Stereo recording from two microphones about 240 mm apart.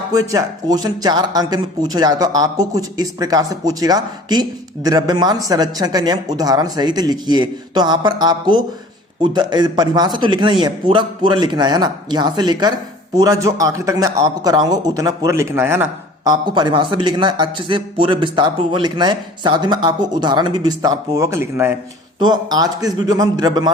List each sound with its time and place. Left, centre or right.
0.1 s speech: centre